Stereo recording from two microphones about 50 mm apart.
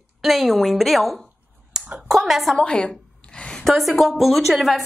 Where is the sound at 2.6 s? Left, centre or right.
Centre.